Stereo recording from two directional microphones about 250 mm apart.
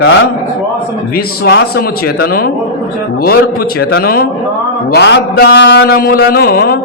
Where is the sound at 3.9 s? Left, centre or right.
Left.